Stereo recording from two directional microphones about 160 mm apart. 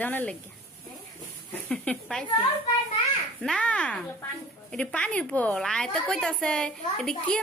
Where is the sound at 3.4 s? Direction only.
5° left (ahead or behind).